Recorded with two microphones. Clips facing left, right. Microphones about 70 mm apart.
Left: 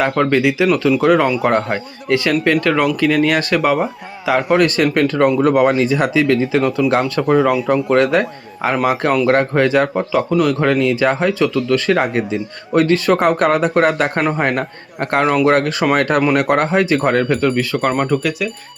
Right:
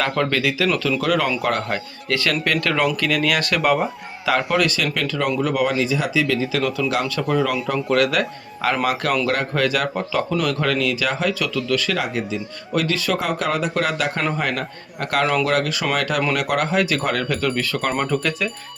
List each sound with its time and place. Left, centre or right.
0.0 s speech: centre
4.4 s speech: left
6.6 s a man's voice: left
9.2 s speech: left
10.1 s a man's voice: centre
10.6 s speech: left
15.4 s speech: left; by 18.4 s centre